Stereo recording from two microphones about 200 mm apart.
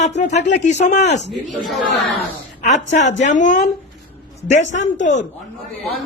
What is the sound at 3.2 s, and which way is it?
A man's voice, 40° left (ahead or behind).